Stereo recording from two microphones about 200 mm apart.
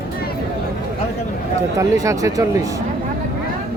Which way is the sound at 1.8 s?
15° right (ahead or behind).